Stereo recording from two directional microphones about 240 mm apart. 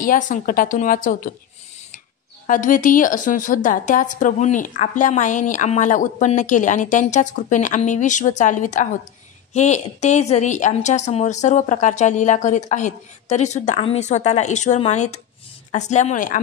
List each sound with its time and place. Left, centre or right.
0.0 s a woman's voice: left
2.4 s a woman's voice: left